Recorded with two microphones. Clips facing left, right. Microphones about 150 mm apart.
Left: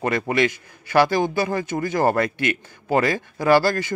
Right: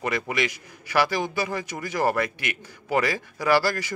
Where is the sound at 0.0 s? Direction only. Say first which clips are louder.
Left 6 dB; 30° left (ahead or behind).